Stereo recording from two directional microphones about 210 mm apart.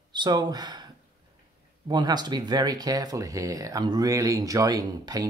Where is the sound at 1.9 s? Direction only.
20° right (ahead or behind).